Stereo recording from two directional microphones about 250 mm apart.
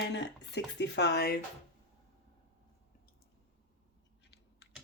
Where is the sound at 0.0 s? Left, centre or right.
Left.